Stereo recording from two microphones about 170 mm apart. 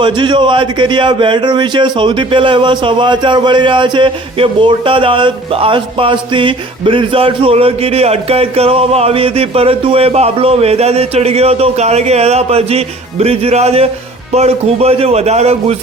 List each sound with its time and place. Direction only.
0.0 s speech: 30° right (ahead or behind)